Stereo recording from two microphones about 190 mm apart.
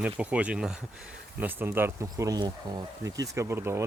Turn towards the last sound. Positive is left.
turn(degrees=-15)  # may be behind; listen again after turning